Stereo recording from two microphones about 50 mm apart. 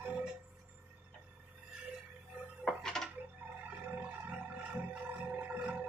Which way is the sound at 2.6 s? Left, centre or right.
Centre.